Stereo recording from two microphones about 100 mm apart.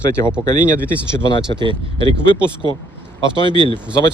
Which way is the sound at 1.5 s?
60° right (ahead or behind).